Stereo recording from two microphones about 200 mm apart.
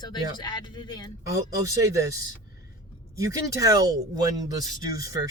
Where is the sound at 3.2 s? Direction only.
15° right (ahead or behind).